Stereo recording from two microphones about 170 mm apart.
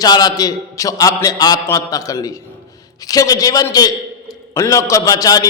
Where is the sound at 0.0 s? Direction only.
25° left (ahead or behind).